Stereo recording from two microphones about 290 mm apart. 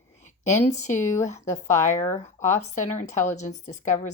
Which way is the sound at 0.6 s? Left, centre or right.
Left.